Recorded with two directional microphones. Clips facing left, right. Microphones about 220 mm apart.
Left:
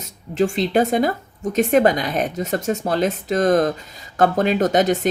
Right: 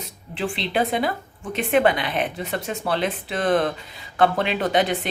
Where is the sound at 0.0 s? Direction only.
45° left (ahead or behind).